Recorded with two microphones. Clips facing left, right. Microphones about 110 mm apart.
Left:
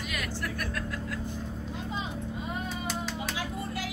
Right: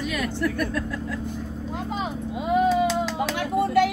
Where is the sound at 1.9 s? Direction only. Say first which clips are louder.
Right 6 dB; 85° right.